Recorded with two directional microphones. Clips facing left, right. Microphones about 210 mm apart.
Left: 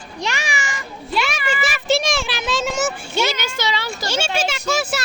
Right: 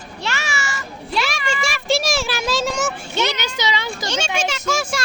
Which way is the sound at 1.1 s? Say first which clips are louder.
Left 1 dB; centre (ahead or behind).